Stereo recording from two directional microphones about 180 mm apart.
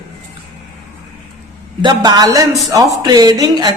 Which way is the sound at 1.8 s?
20° right (ahead or behind).